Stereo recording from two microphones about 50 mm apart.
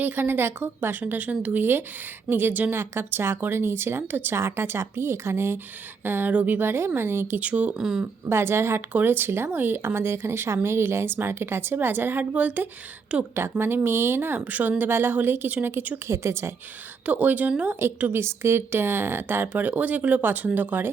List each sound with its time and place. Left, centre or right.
0.0 s speech: right
1.5 s speech: right
2.7 s speech: right
6.1 s speech: right
6.6 s speech: right
7.3 s speech: right
7.8 s speech: centre
8.3 s speech: right
8.9 s speech: right
12.3 s speech: right
13.3 s speech: right
16.0 s a woman's voice: right
17.1 s speech: right
18.1 s speech: right